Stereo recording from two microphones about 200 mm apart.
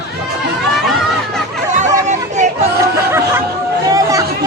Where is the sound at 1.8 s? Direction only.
35° right (ahead or behind).